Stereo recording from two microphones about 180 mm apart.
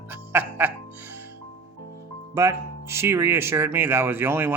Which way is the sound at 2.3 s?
15° right (ahead or behind).